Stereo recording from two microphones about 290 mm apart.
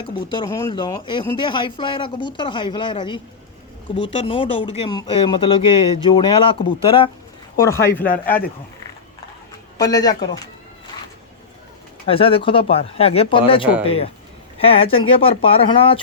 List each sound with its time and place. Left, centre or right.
0.0 s speech: centre
8.0 s speech: left
9.7 s speech: centre
12.0 s speech: centre